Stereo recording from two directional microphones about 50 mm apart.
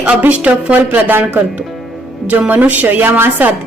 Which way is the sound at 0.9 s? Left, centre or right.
Right.